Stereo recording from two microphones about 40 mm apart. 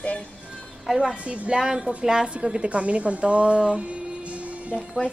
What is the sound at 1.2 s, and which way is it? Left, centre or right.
A woman's voice, right.